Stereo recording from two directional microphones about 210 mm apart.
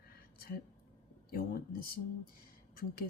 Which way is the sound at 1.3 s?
45° left (ahead or behind).